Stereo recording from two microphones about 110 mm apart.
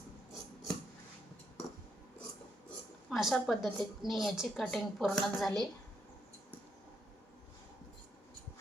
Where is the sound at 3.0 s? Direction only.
Centre (ahead or behind).